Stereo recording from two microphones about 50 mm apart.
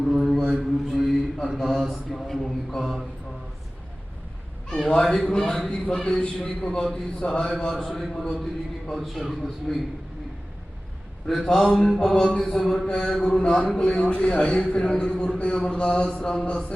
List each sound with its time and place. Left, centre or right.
0.0 s a sound: centre
0.4 s mantra: centre
1.4 s a man's voice: centre
2.2 s a man's voice: centre
4.8 s a man's voice: centre
11.3 s a man's voice: centre